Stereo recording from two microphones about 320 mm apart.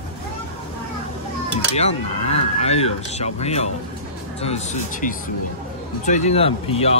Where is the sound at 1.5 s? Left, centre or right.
Centre.